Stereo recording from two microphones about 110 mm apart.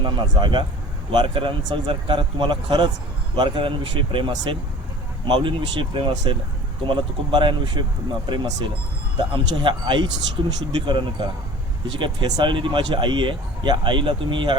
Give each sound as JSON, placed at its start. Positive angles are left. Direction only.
{"t": 0.0, "sound": "speech", "side_deg": -45}